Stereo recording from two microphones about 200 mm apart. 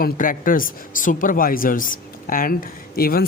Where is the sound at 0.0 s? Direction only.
45° left (ahead or behind).